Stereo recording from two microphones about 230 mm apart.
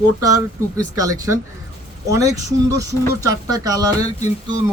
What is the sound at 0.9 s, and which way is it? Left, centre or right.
Speech, centre.